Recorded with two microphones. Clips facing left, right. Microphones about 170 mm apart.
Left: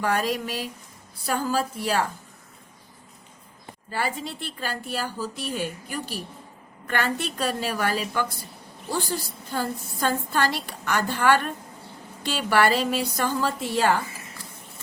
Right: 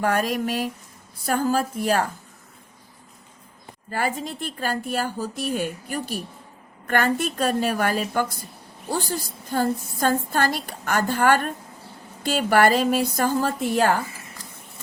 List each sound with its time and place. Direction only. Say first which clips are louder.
0.0 s a woman's voice: right 2 dB; 50° right (ahead or behind)
3.9 s a woman's voice: right 3 dB; 45° right (ahead or behind)